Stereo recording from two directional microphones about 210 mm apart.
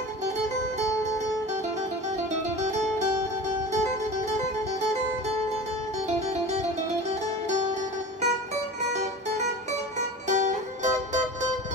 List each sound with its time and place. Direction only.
10.2 s music: 35° right (ahead or behind)